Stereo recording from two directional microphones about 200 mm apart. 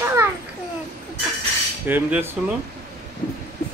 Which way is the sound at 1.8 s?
10° right (ahead or behind).